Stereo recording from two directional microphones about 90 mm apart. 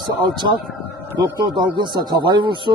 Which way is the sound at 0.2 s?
Centre (ahead or behind).